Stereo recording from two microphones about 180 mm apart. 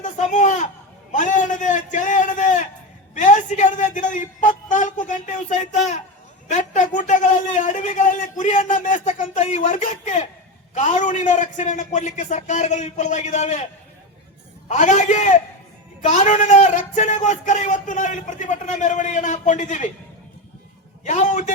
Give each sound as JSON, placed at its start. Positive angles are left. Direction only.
{"t": 0.0, "sound": "a sound", "side_deg": 40}
{"t": 1.1, "sound": "a man's voice", "side_deg": 45}
{"t": 14.7, "sound": "a man's voice", "side_deg": 40}
{"t": 21.0, "sound": "speech", "side_deg": 45}